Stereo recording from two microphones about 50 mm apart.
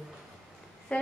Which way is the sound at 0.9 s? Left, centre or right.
Left.